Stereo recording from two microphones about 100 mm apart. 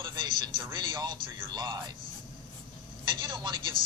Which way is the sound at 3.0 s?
50° right (ahead or behind).